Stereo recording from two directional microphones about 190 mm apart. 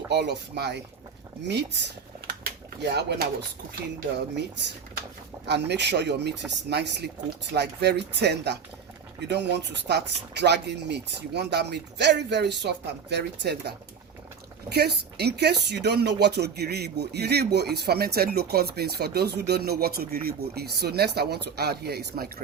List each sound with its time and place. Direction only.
0.1 s speech: 60° right (ahead or behind)
1.5 s a sound: 65° right (ahead or behind)
2.9 s speech: 60° right (ahead or behind)
5.5 s speech: 60° right (ahead or behind)